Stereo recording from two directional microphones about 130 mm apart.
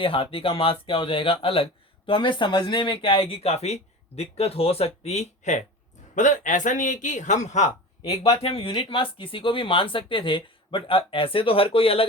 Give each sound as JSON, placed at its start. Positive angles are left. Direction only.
{"t": 0.0, "sound": "a man's voice", "side_deg": 45}
{"t": 8.1, "sound": "speech", "side_deg": 25}
{"t": 8.4, "sound": "speech", "side_deg": 50}